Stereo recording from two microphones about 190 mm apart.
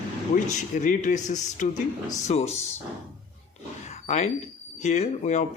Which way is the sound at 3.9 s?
35° left (ahead or behind).